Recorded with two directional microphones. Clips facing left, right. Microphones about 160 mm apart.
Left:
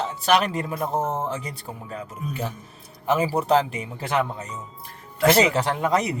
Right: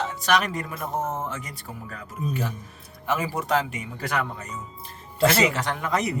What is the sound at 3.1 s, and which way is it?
A man's voice, 30° left (ahead or behind).